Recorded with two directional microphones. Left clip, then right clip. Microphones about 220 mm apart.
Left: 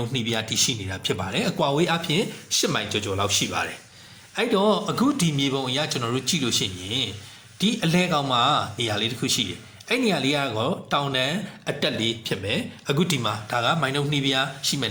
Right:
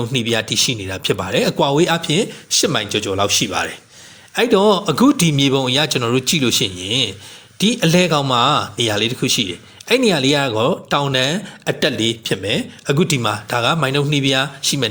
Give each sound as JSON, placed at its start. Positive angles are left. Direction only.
{"t": 0.0, "sound": "a man's voice", "side_deg": -35}